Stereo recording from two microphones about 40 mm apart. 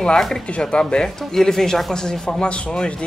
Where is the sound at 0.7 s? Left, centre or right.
Left.